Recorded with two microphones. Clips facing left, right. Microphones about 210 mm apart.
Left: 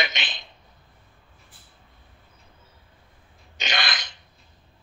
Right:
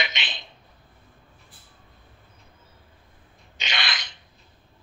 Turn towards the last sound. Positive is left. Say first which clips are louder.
# left 3 dB
turn(degrees=45)  # may be behind; listen again after turning